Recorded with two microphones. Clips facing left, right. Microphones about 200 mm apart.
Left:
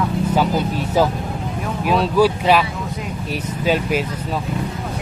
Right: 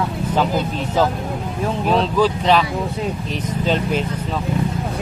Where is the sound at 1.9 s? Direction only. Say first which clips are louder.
Left 2 dB; 10° left (ahead or behind).